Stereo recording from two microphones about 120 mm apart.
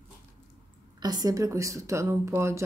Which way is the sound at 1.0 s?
35° right (ahead or behind).